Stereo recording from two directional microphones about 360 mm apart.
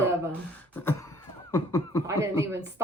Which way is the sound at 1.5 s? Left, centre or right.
Centre.